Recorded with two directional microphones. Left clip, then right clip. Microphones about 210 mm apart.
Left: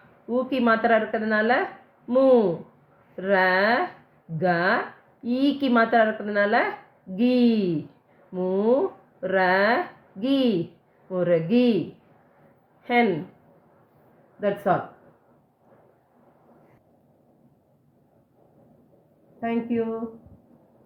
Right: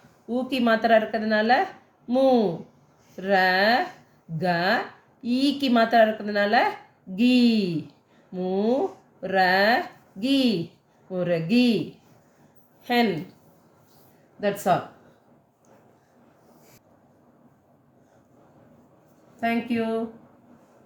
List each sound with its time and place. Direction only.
0.3 s a woman's voice: 10° left (ahead or behind)
12.8 s a woman's voice: 15° left (ahead or behind)
14.7 s a woman's voice: 15° left (ahead or behind)
19.4 s a woman's voice: 15° left (ahead or behind)